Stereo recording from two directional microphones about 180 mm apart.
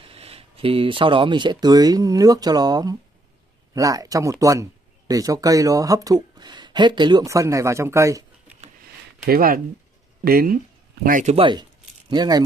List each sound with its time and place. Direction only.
0.0 s speech: 35° right (ahead or behind); by 8.5 s 15° right (ahead or behind)
9.2 s speech: 55° right (ahead or behind)
11.3 s speech: 25° right (ahead or behind)